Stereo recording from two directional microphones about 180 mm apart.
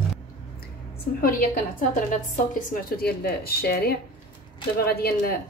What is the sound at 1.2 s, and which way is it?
A woman's voice, 55° left (ahead or behind).